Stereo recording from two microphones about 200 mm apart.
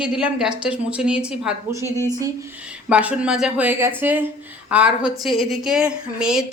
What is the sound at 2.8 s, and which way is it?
A woman's voice, 5° right (ahead or behind).